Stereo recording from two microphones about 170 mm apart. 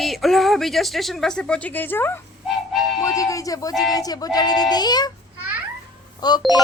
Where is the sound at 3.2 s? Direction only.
20° left (ahead or behind).